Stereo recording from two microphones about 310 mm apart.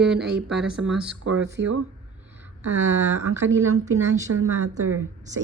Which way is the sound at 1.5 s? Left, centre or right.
Right.